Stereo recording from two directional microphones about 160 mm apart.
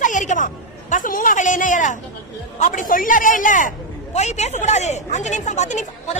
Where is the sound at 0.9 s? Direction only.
55° left (ahead or behind).